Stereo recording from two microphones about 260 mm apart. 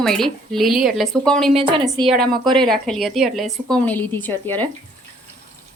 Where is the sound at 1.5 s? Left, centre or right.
Centre.